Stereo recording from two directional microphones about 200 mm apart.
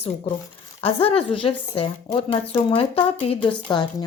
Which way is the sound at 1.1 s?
25° left (ahead or behind).